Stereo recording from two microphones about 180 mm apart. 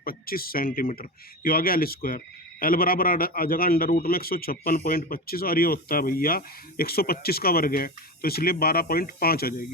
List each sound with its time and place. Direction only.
0.0 s speech: 55° left (ahead or behind)